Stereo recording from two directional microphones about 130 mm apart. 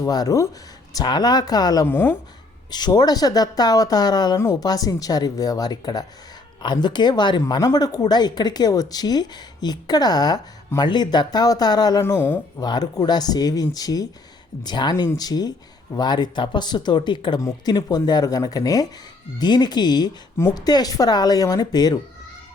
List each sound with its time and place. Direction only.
0.0 s speech: 30° left (ahead or behind)
1.9 s speech: 15° left (ahead or behind)
2.6 s speech: 30° left (ahead or behind)
12.6 s speech: 35° left (ahead or behind)